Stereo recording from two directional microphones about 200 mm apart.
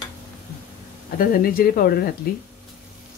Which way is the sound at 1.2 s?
45° left (ahead or behind).